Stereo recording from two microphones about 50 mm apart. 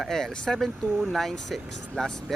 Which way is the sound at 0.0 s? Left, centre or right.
Centre.